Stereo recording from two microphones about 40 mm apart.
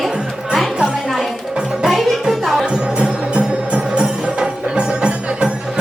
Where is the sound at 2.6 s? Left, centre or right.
Right.